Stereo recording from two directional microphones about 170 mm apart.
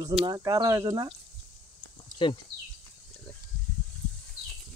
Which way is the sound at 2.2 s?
30° left (ahead or behind).